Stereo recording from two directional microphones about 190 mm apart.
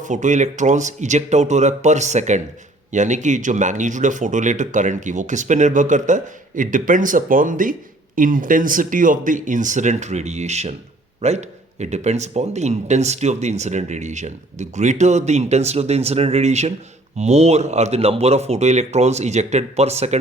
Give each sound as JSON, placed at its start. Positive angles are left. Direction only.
{"t": 0.0, "sound": "speech", "side_deg": -40}